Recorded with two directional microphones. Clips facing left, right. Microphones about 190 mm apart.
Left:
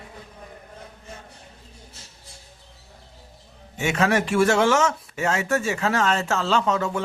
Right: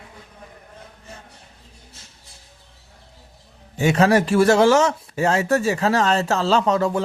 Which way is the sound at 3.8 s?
35° right (ahead or behind).